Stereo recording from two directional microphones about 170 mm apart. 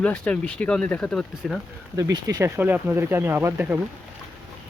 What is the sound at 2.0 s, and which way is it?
Speech, 20° right (ahead or behind).